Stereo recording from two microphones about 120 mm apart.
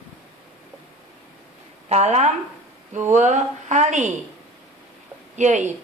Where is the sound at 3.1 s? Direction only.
90° right.